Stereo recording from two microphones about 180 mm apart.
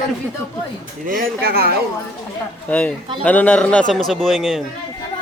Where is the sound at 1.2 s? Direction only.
60° right (ahead or behind).